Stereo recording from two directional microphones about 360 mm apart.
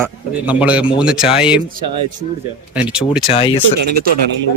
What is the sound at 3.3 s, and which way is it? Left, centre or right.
Speech, centre.